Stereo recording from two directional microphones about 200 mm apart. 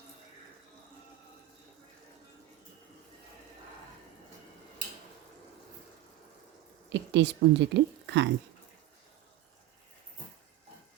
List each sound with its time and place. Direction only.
6.9 s speech: 60° right (ahead or behind)